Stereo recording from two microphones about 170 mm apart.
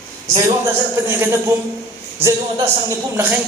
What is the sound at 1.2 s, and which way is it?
A man's voice, 15° right (ahead or behind).